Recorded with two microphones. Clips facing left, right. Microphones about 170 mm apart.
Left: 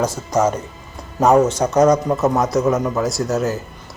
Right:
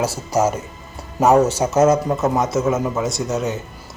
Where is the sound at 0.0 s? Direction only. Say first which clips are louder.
Left 1 dB; 5° right (ahead or behind).